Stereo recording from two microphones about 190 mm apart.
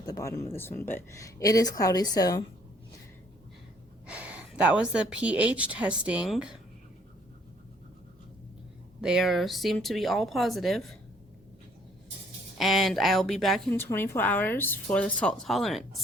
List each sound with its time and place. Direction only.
0.0 s a woman's voice: 15° left (ahead or behind)
4.0 s a woman's voice: 5° right (ahead or behind)
9.0 s speech: 5° right (ahead or behind)
12.5 s speech: centre (ahead or behind)
13.7 s a woman's voice: 10° left (ahead or behind)